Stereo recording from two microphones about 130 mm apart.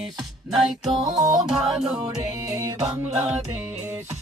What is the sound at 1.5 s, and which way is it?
Music, 5° right (ahead or behind).